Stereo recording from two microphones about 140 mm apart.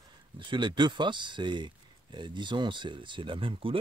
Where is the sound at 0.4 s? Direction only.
35° right (ahead or behind).